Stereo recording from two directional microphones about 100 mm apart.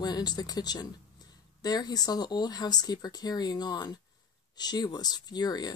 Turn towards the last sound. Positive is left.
turn(degrees=45)  # may be behind; listen again after turning